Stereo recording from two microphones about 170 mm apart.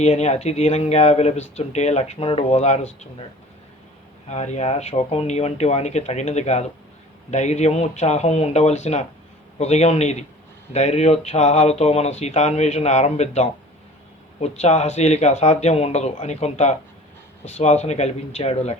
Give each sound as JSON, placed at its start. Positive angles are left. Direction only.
{"t": 0.0, "sound": "speech", "side_deg": 40}
{"t": 4.3, "sound": "speech", "side_deg": 40}